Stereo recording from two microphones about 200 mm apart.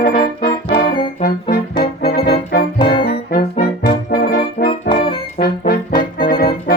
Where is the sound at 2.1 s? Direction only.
50° left (ahead or behind).